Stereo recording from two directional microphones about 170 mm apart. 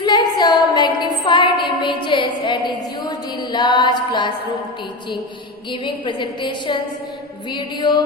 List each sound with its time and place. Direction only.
0.0 s a sound: 25° left (ahead or behind)
5.8 s a woman's voice: 25° left (ahead or behind)
7.5 s a woman's voice: 25° left (ahead or behind)